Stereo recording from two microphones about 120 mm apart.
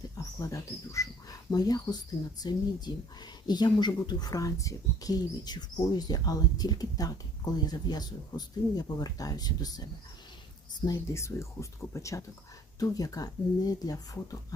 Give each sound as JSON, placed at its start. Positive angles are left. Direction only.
{"t": 0.2, "sound": "speech", "side_deg": 30}
{"t": 10.8, "sound": "speech", "side_deg": 25}